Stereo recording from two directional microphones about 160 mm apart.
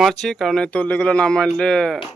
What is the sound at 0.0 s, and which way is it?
Speech, centre (ahead or behind).